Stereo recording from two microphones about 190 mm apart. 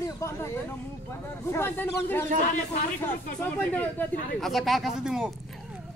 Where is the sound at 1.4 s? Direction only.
10° left (ahead or behind); by 5.3 s 5° right (ahead or behind).